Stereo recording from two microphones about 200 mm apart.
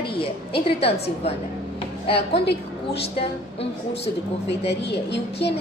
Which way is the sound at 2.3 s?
55° left (ahead or behind).